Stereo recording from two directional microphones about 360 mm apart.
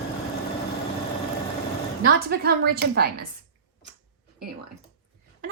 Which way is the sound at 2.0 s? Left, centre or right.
Right.